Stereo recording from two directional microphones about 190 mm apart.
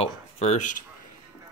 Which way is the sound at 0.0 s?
35° left (ahead or behind).